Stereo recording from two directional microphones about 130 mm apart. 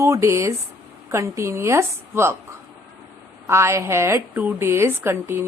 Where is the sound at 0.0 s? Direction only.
25° right (ahead or behind).